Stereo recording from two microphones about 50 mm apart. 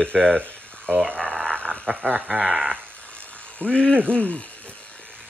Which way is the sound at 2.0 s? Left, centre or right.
Right.